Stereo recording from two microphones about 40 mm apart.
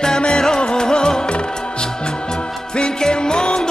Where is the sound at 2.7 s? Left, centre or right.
Left.